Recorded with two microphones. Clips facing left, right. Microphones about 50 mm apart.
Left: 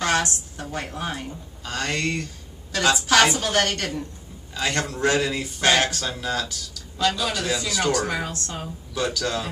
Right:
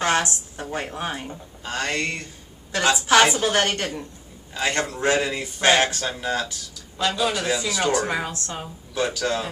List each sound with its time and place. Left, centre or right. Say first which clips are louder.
0.0 s speech: right 1 dB; right